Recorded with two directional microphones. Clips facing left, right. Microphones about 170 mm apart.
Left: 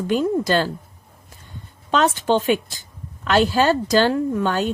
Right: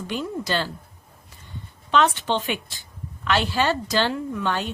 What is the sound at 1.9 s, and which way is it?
A woman's voice, 40° left (ahead or behind).